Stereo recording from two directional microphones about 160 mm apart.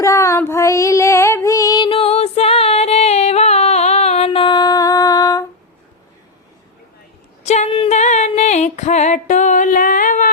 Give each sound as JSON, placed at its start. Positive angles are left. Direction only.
{"t": 0.0, "sound": "female singing", "side_deg": 20}
{"t": 7.4, "sound": "female singing", "side_deg": 45}